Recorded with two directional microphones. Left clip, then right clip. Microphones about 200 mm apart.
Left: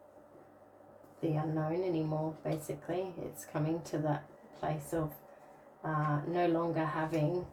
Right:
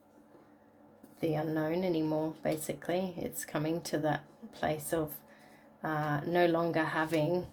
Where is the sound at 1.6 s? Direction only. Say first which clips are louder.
Right 1 dB; 55° right (ahead or behind).